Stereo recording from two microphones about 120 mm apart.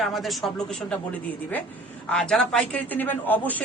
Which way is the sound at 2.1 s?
5° left (ahead or behind).